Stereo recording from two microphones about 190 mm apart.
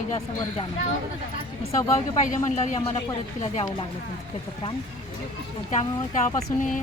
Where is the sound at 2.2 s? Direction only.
40° left (ahead or behind).